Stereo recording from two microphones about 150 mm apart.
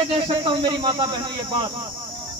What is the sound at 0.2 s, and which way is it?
Speech, 30° right (ahead or behind).